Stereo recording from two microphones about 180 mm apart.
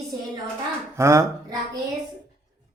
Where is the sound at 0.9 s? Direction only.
15° right (ahead or behind).